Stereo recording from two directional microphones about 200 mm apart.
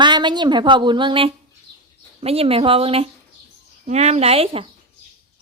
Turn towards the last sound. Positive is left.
turn(degrees=-30)  # may be behind; listen again after turning